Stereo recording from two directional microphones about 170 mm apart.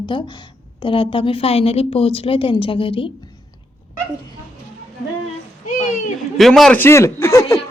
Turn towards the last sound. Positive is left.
turn(degrees=15)  # may be behind; listen again after turning